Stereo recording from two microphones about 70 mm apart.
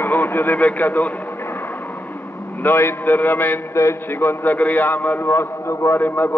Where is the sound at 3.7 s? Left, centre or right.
Left.